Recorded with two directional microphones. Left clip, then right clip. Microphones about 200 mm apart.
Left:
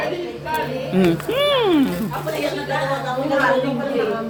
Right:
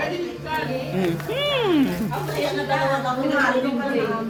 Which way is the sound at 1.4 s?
20° left (ahead or behind).